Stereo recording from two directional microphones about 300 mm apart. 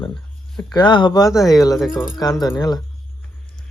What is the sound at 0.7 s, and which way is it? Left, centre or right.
Speech, centre.